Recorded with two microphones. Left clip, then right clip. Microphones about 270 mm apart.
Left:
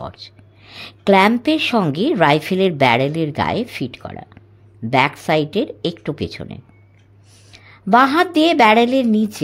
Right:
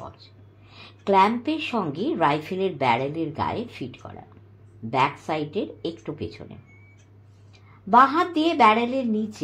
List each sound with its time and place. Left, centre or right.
0.0 s speech: left